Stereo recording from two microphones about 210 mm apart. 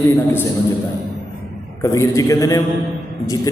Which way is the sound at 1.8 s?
15° left (ahead or behind).